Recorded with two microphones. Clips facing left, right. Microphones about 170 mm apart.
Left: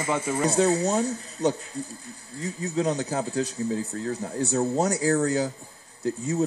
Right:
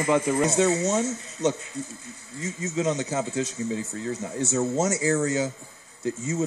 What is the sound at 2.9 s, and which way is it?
Speech, 20° right (ahead or behind).